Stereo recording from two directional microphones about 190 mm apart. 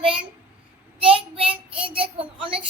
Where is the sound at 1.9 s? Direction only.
30° right (ahead or behind).